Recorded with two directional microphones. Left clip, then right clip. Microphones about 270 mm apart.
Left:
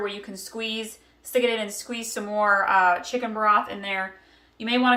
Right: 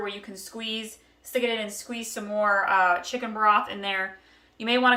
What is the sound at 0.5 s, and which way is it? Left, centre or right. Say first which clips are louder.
Speech: left 3 dB; centre.